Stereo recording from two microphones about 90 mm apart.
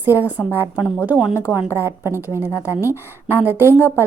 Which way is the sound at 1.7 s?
25° right (ahead or behind).